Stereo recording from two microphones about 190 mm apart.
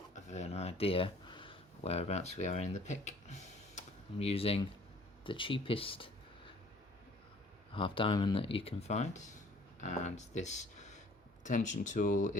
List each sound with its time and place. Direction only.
0.1 s a sound: 35° left (ahead or behind)
5.2 s speech: 25° left (ahead or behind)
7.7 s speech: 25° left (ahead or behind)